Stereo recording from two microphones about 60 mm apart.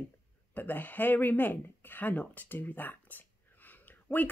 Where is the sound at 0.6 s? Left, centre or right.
Left.